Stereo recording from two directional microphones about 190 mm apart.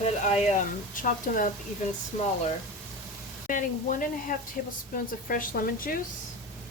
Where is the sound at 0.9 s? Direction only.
45° left (ahead or behind).